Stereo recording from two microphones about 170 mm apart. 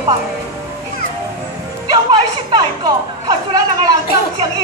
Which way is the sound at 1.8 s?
25° right (ahead or behind).